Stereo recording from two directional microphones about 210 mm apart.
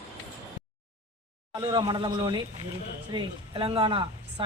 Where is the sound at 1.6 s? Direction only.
25° right (ahead or behind).